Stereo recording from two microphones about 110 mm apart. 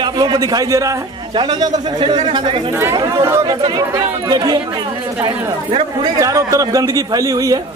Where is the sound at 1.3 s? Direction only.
40° right (ahead or behind).